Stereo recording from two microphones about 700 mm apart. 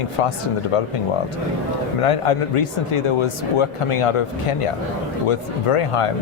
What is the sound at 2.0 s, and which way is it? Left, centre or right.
Speech, left.